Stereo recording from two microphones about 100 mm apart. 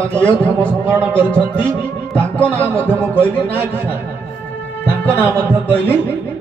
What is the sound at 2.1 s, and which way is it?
Music, 15° left (ahead or behind).